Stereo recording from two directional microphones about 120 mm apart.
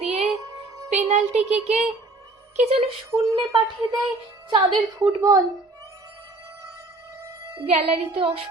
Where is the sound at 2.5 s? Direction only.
60° right (ahead or behind).